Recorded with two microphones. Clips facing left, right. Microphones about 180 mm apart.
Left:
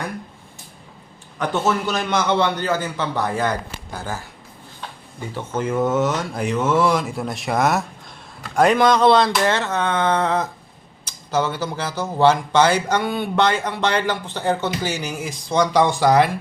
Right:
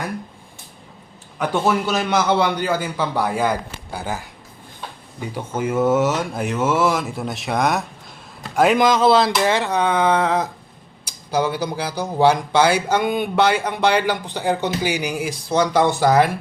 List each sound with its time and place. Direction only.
1.4 s speech: 10° right (ahead or behind)
5.3 s speech: 10° right (ahead or behind)